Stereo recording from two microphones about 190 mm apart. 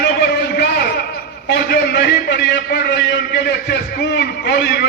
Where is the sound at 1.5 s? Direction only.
60° left (ahead or behind).